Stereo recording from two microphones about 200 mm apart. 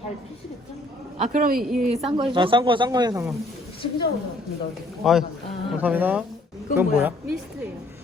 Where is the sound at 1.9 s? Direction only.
30° right (ahead or behind).